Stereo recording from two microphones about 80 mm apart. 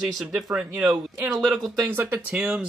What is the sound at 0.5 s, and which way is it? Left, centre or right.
Speech, centre.